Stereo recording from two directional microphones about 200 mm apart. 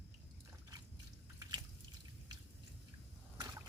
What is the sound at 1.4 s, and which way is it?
Drip, 20° right (ahead or behind).